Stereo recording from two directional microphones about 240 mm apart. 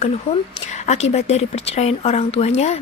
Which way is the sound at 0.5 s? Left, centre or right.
Left.